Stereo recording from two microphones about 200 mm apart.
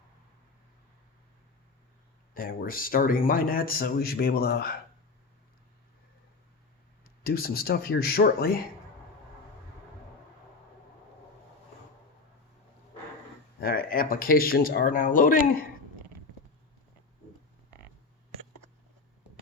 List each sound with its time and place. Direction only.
2.3 s a man's voice: 45° left (ahead or behind)
7.0 s a man's voice: 50° left (ahead or behind)
13.6 s a man's voice: 50° left (ahead or behind)